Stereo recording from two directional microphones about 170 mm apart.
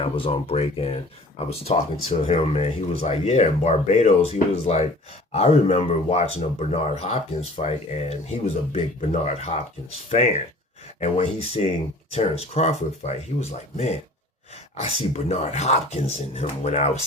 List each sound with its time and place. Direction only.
0.0 s speech: 35° left (ahead or behind)